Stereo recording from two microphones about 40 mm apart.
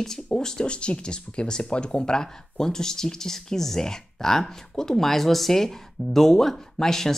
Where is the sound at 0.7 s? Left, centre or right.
Left.